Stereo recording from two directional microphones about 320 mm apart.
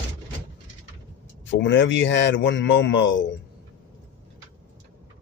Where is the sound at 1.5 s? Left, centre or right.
Left.